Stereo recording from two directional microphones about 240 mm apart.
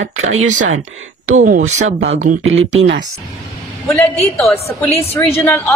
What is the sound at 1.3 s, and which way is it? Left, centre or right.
Speech, right.